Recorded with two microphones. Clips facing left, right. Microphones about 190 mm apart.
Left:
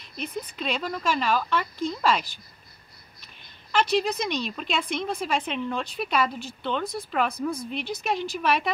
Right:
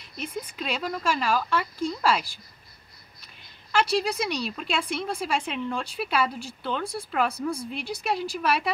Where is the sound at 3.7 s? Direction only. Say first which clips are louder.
Left 1 dB; 10° right (ahead or behind).